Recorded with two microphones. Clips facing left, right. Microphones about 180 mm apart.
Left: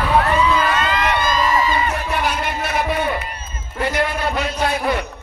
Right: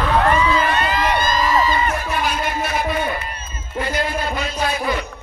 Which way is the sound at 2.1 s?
65° left (ahead or behind).